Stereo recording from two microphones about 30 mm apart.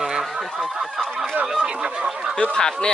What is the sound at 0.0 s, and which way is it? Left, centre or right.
Fowl, centre.